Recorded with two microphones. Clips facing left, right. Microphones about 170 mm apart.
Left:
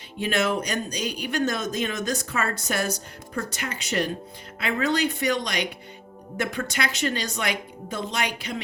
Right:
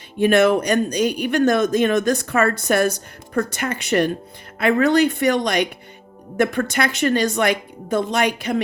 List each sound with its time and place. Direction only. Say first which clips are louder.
0.2 s a woman's voice: right 10 dB; 55° right (ahead or behind)